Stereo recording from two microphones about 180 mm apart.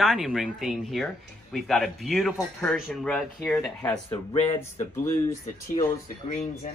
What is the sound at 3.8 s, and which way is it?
Speech, 20° left (ahead or behind).